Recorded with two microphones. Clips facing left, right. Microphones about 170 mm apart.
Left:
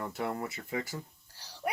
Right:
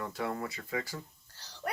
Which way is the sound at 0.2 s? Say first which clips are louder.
Left 1 dB; 25° left (ahead or behind).